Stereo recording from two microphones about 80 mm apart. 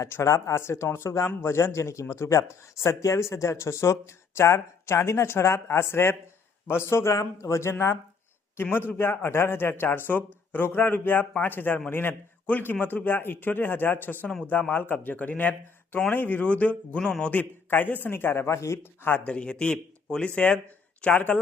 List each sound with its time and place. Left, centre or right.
0.0 s a man's voice: left; by 17.4 s centre
17.7 s a man's voice: left
19.3 s a man's voice: centre